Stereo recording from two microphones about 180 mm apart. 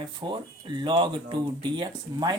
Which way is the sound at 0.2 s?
25° right (ahead or behind).